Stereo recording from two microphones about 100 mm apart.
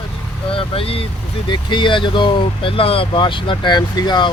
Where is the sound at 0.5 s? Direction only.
70° left (ahead or behind).